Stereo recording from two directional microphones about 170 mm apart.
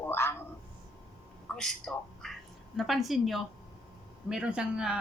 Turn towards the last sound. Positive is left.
turn(degrees=-5)  # may be behind; listen again after turning